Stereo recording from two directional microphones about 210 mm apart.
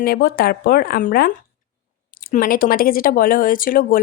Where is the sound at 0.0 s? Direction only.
45° left (ahead or behind).